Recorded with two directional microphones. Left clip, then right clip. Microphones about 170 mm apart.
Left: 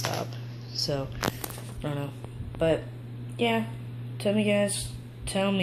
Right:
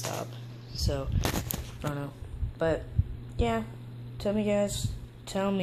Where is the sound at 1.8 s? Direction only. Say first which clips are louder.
Left 2 dB; 15° right (ahead or behind).